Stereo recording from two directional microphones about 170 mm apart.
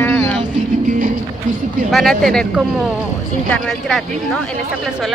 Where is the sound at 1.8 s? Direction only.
Centre (ahead or behind).